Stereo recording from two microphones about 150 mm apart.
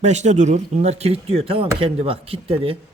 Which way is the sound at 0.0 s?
50° right (ahead or behind).